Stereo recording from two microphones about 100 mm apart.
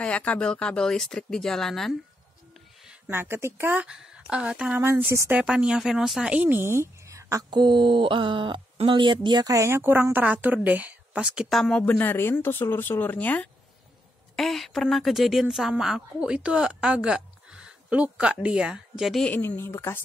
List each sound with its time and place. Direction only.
0.0 s speech: 10° left (ahead or behind)
3.1 s speech: 25° right (ahead or behind)
4.7 s speech: 20° right (ahead or behind)
5.3 s speech: 10° right (ahead or behind); by 7.4 s 30° right (ahead or behind)
7.5 s a sound: 50° right (ahead or behind)
8.8 s speech: 55° right (ahead or behind)
9.5 s speech: 30° right (ahead or behind); by 11.8 s centre (ahead or behind)
11.8 s speech: 15° left (ahead or behind)
14.3 s speech: centre (ahead or behind)
19.2 s speech: 20° left (ahead or behind)